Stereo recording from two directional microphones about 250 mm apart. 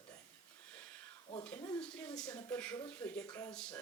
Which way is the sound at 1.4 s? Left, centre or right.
Centre.